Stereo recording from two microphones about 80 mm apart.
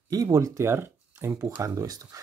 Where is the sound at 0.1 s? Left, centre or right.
Right.